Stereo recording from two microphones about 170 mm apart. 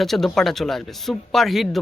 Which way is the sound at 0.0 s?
Centre (ahead or behind).